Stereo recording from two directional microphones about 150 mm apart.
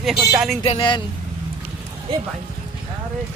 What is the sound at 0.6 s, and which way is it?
Speech, 35° left (ahead or behind).